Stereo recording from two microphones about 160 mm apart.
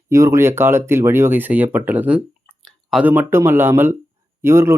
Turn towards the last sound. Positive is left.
turn(degrees=-15)  # may be behind; listen again after turning